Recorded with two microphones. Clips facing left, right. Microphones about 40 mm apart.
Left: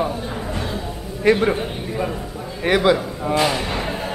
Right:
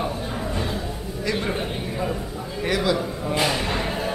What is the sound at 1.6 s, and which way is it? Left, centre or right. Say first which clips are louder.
Speech: left 2 dB; centre.